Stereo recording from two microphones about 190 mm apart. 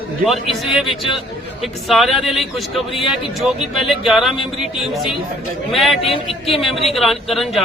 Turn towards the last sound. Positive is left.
turn(degrees=0)  # may be behind; listen again after turning